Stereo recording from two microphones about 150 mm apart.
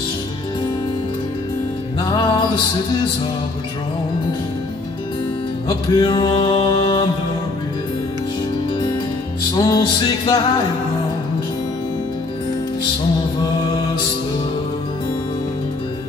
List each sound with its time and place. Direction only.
2.0 s music: 30° left (ahead or behind)
5.7 s music: 30° left (ahead or behind)
9.6 s music: 25° left (ahead or behind)